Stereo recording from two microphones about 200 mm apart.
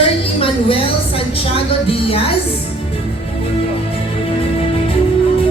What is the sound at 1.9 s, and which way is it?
Speech, 30° left (ahead or behind).